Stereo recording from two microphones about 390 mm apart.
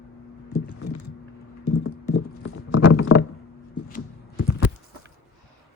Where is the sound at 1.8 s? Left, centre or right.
Left.